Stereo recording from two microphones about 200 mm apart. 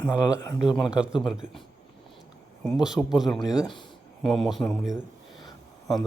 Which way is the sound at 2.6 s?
Centre (ahead or behind).